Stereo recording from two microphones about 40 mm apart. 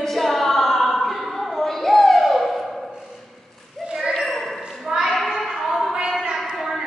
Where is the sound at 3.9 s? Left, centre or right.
Centre.